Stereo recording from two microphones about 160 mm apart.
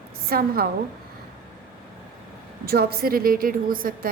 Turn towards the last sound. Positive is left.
turn(degrees=-60)  # may be behind; listen again after turning